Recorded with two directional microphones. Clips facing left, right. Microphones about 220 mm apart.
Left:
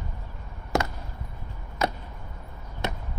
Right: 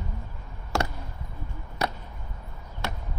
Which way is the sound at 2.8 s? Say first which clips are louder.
Left 3 dB; 20° left (ahead or behind).